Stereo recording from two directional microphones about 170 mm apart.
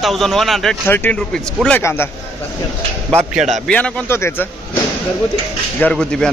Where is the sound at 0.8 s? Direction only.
10° left (ahead or behind).